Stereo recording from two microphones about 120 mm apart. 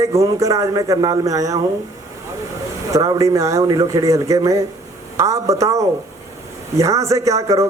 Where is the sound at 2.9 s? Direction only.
30° right (ahead or behind).